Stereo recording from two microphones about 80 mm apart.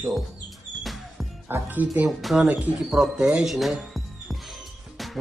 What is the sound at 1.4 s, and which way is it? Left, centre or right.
Speech, right.